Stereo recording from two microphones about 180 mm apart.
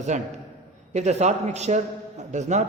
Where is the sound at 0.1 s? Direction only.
40° right (ahead or behind).